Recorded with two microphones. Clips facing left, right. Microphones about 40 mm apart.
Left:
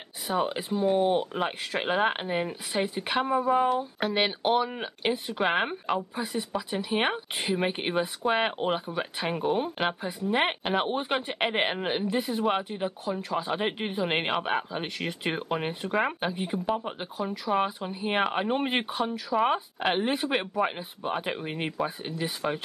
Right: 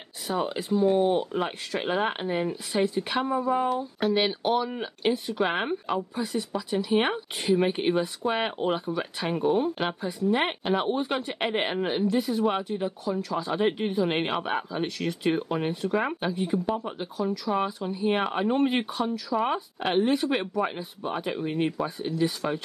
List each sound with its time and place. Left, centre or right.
0.3 s speech: centre
3.6 s speech: centre